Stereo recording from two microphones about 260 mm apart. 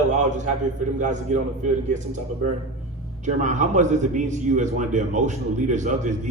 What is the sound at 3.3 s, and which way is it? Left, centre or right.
A man's voice, right.